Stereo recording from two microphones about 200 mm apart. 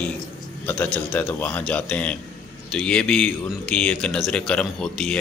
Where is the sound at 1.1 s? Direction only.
5° left (ahead or behind).